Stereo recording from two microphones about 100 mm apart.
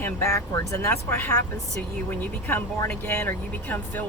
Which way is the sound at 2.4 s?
20° left (ahead or behind).